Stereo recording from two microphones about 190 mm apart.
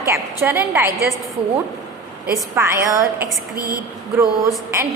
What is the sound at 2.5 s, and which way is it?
Speech, 15° right (ahead or behind).